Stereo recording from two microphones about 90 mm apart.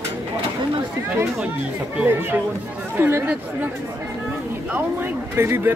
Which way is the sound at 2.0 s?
25° right (ahead or behind).